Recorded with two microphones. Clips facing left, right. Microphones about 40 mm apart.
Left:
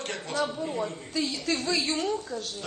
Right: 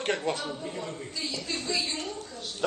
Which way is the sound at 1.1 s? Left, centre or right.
Left.